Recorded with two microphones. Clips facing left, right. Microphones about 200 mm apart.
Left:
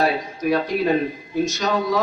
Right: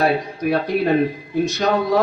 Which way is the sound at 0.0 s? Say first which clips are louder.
Right 2 dB; 55° right (ahead or behind).